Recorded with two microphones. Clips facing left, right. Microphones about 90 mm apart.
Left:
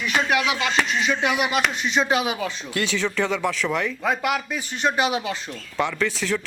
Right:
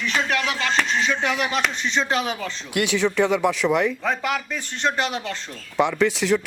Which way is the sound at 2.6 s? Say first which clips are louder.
Right 5 dB; 15° right (ahead or behind).